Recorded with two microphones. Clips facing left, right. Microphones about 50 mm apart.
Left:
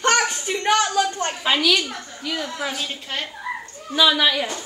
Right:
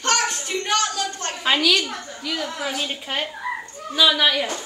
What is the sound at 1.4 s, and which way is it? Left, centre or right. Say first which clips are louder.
A woman's voice: right 1 dB; centre.